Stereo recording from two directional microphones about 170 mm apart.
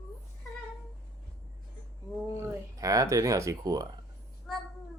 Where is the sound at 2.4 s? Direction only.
20° right (ahead or behind).